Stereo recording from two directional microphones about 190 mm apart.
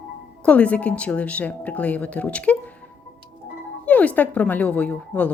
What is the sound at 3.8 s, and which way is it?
A woman's voice, 10° left (ahead or behind).